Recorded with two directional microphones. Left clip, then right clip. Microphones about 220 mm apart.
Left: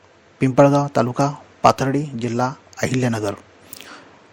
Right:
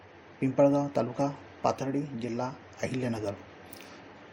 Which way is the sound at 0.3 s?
40° left (ahead or behind).